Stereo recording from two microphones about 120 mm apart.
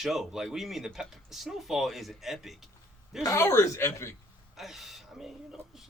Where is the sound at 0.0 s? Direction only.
Centre (ahead or behind).